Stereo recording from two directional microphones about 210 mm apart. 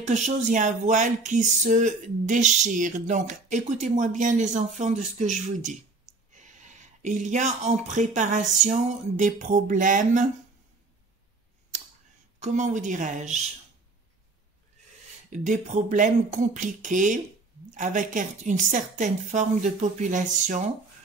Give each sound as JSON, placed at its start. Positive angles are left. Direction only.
{"t": 0.0, "sound": "speech", "side_deg": -35}
{"t": 12.4, "sound": "speech", "side_deg": -35}
{"t": 15.2, "sound": "speech", "side_deg": -35}